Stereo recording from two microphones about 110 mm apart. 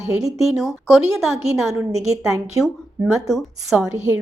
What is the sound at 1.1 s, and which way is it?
Speech, 30° right (ahead or behind).